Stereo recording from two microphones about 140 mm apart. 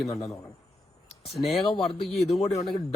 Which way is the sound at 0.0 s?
Centre (ahead or behind).